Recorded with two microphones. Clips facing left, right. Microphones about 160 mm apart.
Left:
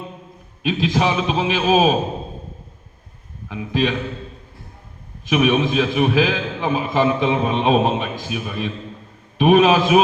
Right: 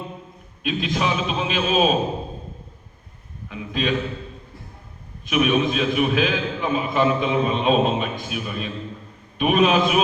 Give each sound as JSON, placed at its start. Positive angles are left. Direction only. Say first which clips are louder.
{"t": 0.6, "sound": "a man's voice", "louder": "left 4 dB", "side_deg": 90}
{"t": 3.5, "sound": "a man's voice", "louder": "left 4 dB", "side_deg": 90}
{"t": 5.2, "sound": "a man's voice", "louder": "left 2 dB", "side_deg": 90}